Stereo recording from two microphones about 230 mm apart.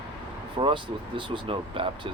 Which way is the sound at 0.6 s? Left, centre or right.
Right.